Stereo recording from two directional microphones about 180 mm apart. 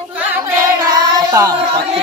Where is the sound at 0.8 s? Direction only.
20° right (ahead or behind).